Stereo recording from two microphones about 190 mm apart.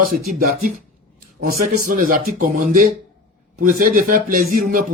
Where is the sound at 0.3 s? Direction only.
45° right (ahead or behind).